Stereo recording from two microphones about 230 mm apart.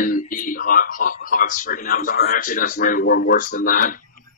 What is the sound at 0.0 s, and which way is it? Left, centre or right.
Speech, left.